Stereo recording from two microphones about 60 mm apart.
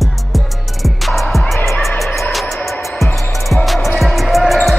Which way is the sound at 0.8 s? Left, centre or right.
Centre.